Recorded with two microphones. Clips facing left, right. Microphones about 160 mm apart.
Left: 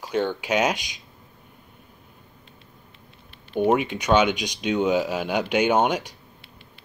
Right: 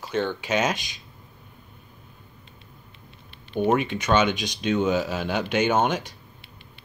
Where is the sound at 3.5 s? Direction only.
5° left (ahead or behind).